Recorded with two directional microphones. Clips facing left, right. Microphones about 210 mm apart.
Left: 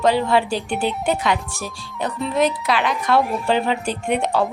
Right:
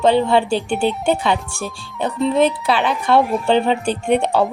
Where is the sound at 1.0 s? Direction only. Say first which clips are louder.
Right 3 dB; 30° right (ahead or behind).